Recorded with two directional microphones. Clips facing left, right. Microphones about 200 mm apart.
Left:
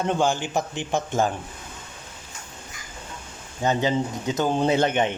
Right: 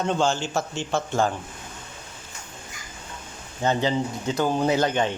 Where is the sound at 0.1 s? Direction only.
15° left (ahead or behind).